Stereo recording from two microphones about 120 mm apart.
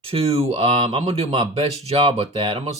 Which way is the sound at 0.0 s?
55° right (ahead or behind).